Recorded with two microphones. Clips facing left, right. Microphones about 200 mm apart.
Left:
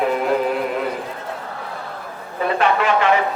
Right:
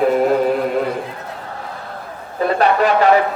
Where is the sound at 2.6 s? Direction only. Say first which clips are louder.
Right 4 dB; 40° right (ahead or behind).